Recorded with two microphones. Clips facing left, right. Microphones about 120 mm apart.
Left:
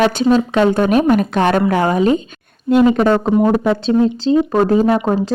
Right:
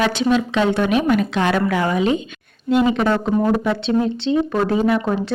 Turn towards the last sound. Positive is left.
turn(degrees=35)  # may be behind; listen again after turning